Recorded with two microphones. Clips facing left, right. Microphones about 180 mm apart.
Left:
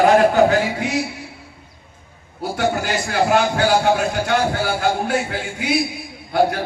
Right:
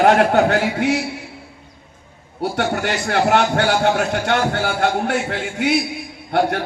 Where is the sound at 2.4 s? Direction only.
65° right (ahead or behind).